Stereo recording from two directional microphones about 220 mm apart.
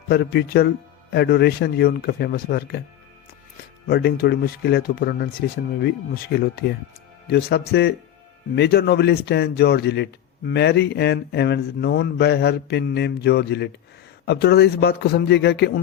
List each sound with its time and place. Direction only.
0.1 s a man's voice: 45° left (ahead or behind)
3.8 s a man's voice: 45° left (ahead or behind)